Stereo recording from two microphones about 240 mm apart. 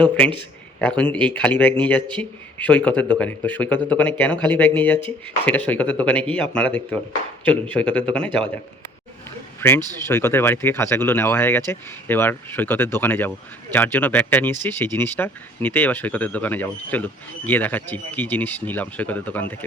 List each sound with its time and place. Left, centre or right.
0.8 s a man's voice: centre
9.6 s speech: centre